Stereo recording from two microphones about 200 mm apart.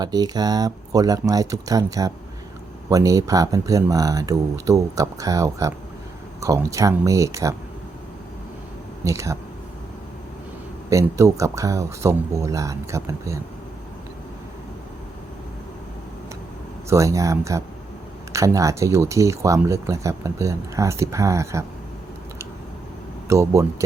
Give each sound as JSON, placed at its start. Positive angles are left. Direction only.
{"t": 0.0, "sound": "speech", "side_deg": -20}
{"t": 9.0, "sound": "speech", "side_deg": -15}
{"t": 10.8, "sound": "speech", "side_deg": -15}
{"t": 16.9, "sound": "speech", "side_deg": -15}
{"t": 23.3, "sound": "speech", "side_deg": -15}